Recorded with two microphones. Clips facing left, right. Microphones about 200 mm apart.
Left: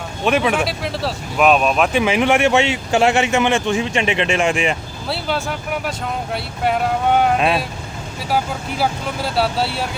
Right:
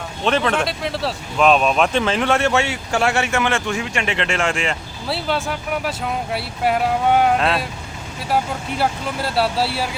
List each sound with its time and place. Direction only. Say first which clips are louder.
0.3 s speech: left 2 dB; 10° left (ahead or behind)
5.0 s speech: even; centre (ahead or behind)
7.3 s speech: left 2 dB; 15° left (ahead or behind)
8.8 s speech: left 1 dB; centre (ahead or behind)